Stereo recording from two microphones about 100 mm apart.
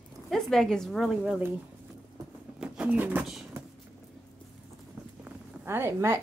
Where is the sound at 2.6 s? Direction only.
15° right (ahead or behind).